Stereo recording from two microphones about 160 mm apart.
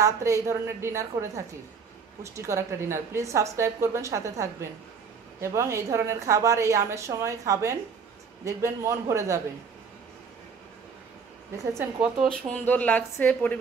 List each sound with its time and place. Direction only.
0.0 s a woman's voice: 20° right (ahead or behind)
11.5 s speech: 20° right (ahead or behind)
12.4 s a woman's voice: 10° left (ahead or behind)